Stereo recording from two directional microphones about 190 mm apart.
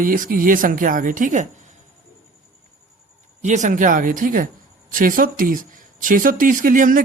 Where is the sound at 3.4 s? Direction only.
40° right (ahead or behind).